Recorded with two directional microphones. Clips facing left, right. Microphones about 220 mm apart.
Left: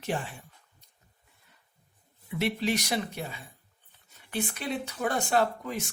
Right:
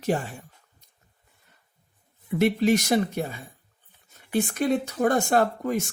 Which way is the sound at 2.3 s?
45° right (ahead or behind).